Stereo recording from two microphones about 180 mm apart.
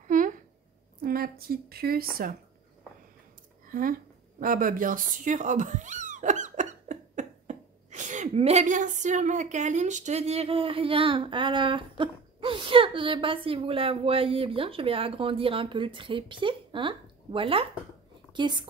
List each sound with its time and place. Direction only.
0.0 s a sound: 45° right (ahead or behind)
1.0 s a woman's voice: 55° right (ahead or behind)
4.4 s speech: 50° right (ahead or behind); by 18.7 s 25° right (ahead or behind)